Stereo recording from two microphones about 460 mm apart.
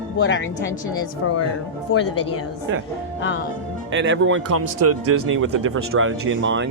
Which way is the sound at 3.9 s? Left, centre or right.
Right.